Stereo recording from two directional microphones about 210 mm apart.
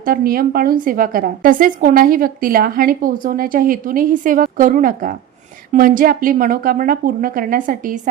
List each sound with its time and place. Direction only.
0.0 s a woman's voice: 45° right (ahead or behind)